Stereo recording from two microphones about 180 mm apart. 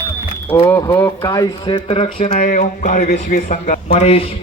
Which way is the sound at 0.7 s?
15° left (ahead or behind).